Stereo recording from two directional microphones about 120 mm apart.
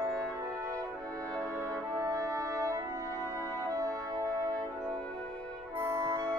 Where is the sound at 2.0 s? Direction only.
30° right (ahead or behind).